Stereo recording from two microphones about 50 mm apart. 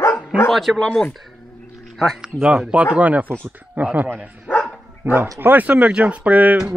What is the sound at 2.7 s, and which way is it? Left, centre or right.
Speech, right.